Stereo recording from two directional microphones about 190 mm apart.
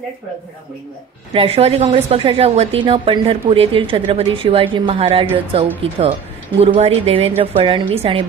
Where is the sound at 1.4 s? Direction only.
30° right (ahead or behind).